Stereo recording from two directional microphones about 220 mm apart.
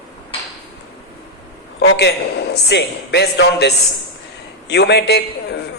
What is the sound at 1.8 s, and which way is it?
A man's voice, 50° left (ahead or behind).